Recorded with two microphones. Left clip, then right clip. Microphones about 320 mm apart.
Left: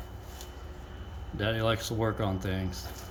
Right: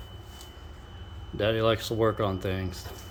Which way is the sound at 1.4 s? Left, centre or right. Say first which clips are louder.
Right 4 dB; centre.